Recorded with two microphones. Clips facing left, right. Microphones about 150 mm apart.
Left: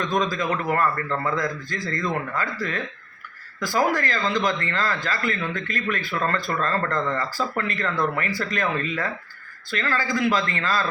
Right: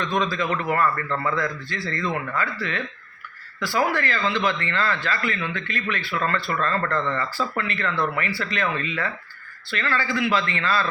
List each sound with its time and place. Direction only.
0.2 s a man's voice: 45° left (ahead or behind)